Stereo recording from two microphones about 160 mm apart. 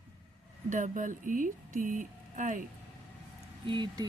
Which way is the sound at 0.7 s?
55° right (ahead or behind).